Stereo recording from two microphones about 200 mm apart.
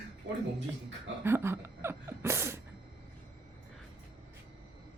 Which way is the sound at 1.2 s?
10° right (ahead or behind).